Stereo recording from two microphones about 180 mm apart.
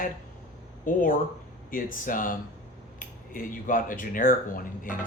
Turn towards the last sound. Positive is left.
turn(degrees=50)  # may be behind; listen again after turning